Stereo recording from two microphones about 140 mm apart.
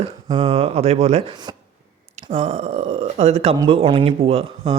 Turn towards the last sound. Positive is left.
turn(degrees=-45)  # may be behind; listen again after turning